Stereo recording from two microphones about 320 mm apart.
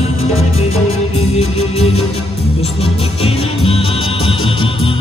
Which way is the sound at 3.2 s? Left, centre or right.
Centre.